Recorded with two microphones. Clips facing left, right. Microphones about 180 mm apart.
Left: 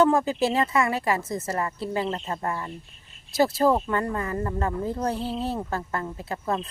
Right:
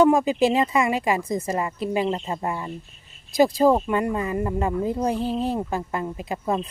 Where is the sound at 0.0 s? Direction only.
15° right (ahead or behind).